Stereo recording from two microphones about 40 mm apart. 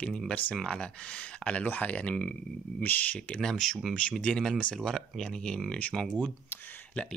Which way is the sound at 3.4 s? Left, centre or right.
Centre.